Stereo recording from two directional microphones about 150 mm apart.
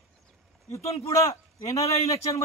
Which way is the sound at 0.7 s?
45° left (ahead or behind).